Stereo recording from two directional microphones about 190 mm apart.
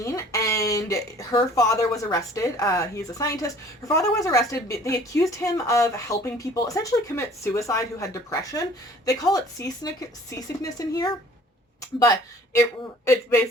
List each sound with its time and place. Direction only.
0.0 s speech: 15° left (ahead or behind)